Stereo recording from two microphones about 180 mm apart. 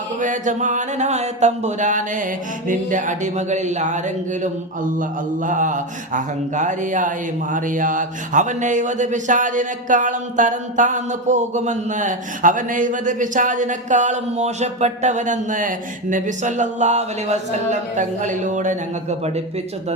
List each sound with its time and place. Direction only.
0.2 s speech: 45° right (ahead or behind)
2.6 s music: 45° right (ahead or behind)
5.5 s speech: 45° right (ahead or behind)